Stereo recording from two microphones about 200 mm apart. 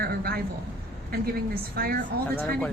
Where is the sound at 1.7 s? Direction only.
50° right (ahead or behind).